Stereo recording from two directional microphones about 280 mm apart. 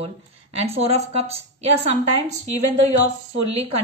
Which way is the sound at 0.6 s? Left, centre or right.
Right.